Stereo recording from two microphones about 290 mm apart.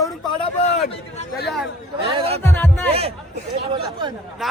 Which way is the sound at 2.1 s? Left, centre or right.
Centre.